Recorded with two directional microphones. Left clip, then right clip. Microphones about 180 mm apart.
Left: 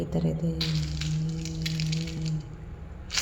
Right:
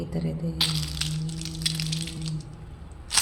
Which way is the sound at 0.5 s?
30° right (ahead or behind).